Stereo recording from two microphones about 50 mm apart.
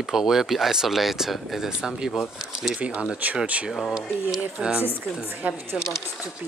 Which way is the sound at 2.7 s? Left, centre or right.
Right.